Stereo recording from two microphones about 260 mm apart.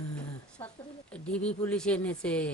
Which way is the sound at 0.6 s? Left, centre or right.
Centre.